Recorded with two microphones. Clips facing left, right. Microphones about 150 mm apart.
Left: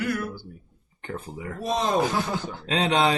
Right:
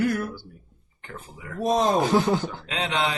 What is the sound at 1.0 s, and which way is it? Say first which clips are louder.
Speech: left 7 dB; 35° left (ahead or behind).